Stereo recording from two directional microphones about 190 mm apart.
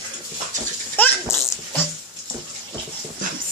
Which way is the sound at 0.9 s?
10° left (ahead or behind).